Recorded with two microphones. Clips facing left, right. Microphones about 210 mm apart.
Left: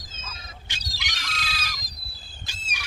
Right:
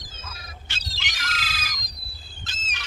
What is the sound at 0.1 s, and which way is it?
Goose, 25° left (ahead or behind).